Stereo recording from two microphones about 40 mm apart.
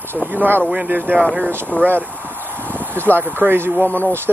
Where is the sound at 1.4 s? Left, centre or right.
Right.